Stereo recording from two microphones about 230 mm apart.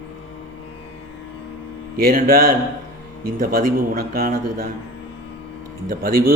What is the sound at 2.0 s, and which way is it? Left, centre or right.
A man's voice, right.